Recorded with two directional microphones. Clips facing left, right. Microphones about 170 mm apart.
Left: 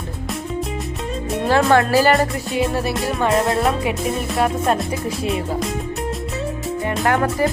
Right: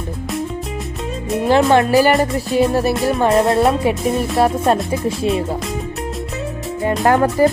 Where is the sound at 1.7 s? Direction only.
20° right (ahead or behind).